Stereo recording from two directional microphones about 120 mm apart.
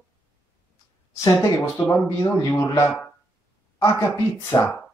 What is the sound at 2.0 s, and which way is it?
Speech, 25° left (ahead or behind).